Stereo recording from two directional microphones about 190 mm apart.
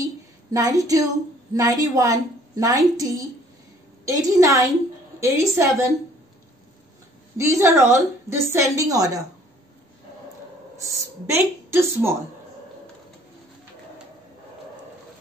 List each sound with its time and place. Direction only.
0.5 s a woman's voice: 20° right (ahead or behind)
7.3 s a woman's voice: 15° right (ahead or behind)
10.8 s a woman's voice: 15° right (ahead or behind)